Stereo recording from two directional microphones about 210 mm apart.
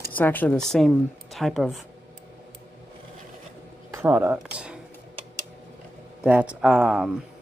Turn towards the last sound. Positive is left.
turn(degrees=-5)  # may be behind; listen again after turning